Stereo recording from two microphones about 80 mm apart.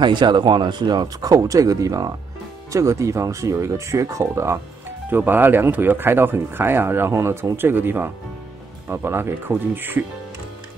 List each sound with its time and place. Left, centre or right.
0.0 s speech: right
5.1 s speech: right